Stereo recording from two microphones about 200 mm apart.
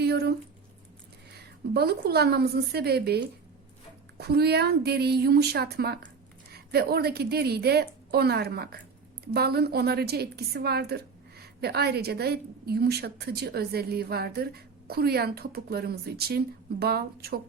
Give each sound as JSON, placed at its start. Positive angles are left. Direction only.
{"t": 0.0, "sound": "a sound", "side_deg": -55}
{"t": 1.7, "sound": "a woman's voice", "side_deg": -50}
{"t": 4.2, "sound": "a woman's voice", "side_deg": -55}